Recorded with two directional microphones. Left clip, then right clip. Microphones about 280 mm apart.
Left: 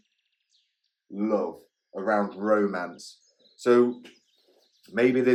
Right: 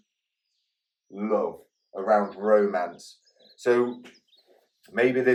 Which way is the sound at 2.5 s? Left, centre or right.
Left.